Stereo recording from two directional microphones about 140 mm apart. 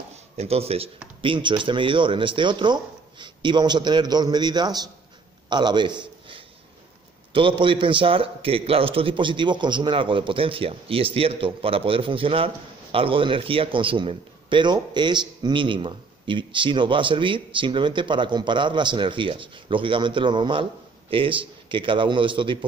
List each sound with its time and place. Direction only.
0.4 s a man's voice: 45° right (ahead or behind)